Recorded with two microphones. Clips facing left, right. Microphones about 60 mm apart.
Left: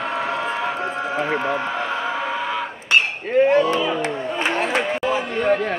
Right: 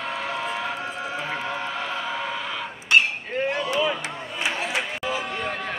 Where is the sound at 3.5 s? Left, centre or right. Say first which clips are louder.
Left 6 dB; left.